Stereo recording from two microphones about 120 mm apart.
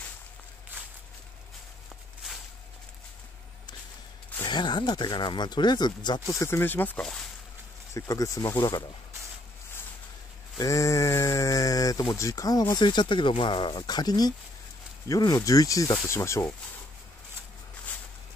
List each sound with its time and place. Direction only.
0.7 s a sound: 15° right (ahead or behind)
4.5 s speech: 40° left (ahead or behind)
6.4 s speech: 20° left (ahead or behind)
7.0 s speech: 5° left (ahead or behind)
7.9 s speech: 30° left (ahead or behind)
10.6 s speech: 25° left (ahead or behind)